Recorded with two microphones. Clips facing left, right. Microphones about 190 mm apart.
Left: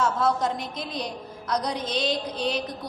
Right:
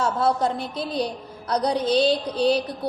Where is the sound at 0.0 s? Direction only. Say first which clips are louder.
Right 2 dB; 30° right (ahead or behind).